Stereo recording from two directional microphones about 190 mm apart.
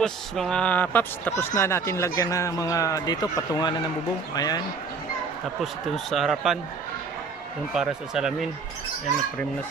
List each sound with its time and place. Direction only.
0.0 s speech: 5° left (ahead or behind); by 4.6 s 20° left (ahead or behind)
6.1 s speech: centre (ahead or behind)
7.7 s speech: 5° right (ahead or behind)